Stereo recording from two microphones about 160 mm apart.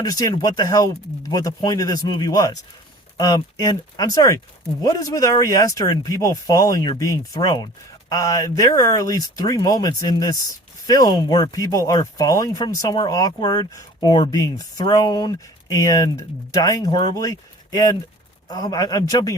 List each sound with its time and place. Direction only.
0.0 s speech: 25° left (ahead or behind)